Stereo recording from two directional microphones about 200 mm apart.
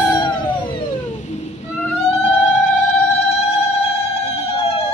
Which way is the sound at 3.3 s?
30° left (ahead or behind).